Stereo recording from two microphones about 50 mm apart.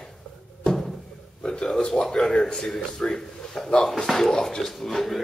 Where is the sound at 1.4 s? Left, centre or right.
Centre.